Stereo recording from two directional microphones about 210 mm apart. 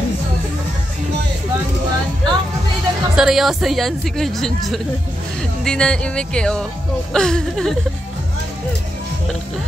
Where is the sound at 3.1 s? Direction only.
Centre (ahead or behind).